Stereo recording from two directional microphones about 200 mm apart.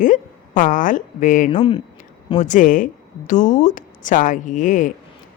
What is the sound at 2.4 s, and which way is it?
A woman's voice, 40° left (ahead or behind).